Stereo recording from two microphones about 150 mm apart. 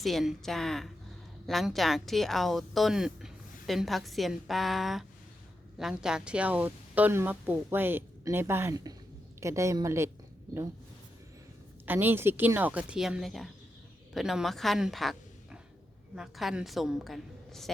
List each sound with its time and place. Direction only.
0.0 s a woman's voice: centre (ahead or behind); by 10.1 s 20° right (ahead or behind)
11.9 s speech: 15° right (ahead or behind)
16.1 s speech: centre (ahead or behind)